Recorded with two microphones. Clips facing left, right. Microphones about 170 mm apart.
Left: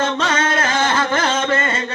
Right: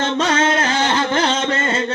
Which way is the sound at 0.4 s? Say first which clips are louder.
Right 1 dB; 25° right (ahead or behind).